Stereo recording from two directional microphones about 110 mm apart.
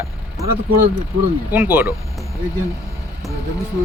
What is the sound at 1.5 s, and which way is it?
Speech, 15° right (ahead or behind).